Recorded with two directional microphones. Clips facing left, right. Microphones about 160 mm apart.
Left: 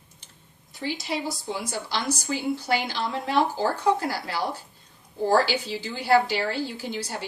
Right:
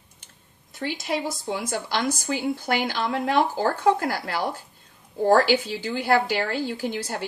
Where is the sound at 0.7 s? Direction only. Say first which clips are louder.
Right 2 dB; 50° right (ahead or behind).